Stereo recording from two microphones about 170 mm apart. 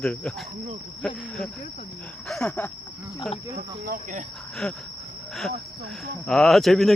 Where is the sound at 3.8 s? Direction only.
50° right (ahead or behind).